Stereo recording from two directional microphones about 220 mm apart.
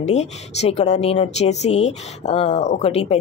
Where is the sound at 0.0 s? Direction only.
30° left (ahead or behind).